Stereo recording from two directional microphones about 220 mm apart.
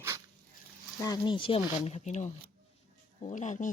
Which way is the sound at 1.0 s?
20° left (ahead or behind).